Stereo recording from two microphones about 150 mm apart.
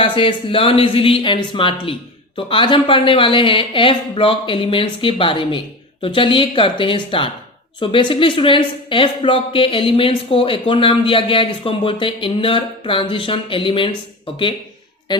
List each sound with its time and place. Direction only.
0.0 s a woman's voice: 35° left (ahead or behind)
15.1 s speech: 30° left (ahead or behind)